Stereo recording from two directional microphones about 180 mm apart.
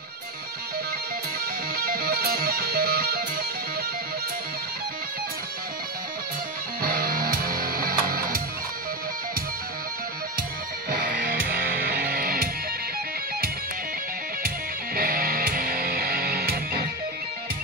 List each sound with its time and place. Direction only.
1.9 s music: 55° right (ahead or behind)
6.8 s music: 55° right (ahead or behind)
10.9 s music: 50° right (ahead or behind)
15.0 s music: 55° right (ahead or behind)